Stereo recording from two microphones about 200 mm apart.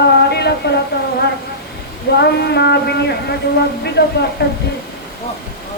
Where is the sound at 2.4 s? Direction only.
55° left (ahead or behind).